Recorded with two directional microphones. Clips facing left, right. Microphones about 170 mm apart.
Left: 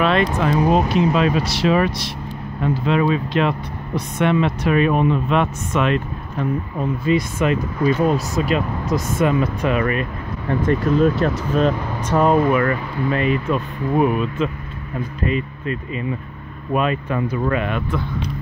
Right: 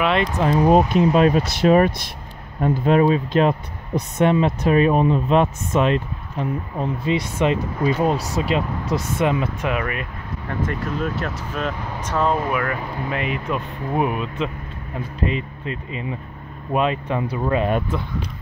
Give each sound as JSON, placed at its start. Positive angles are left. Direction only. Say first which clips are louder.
{"t": 0.0, "sound": "speech", "louder": "left 2 dB", "side_deg": -20}
{"t": 0.7, "sound": "speech", "louder": "right 4 dB", "side_deg": -45}
{"t": 10.7, "sound": "speech", "louder": "left 12 dB", "side_deg": 25}
{"t": 12.1, "sound": "speech", "louder": "left 5 dB", "side_deg": 10}
{"t": 12.5, "sound": "speech", "louder": "left 5 dB", "side_deg": -10}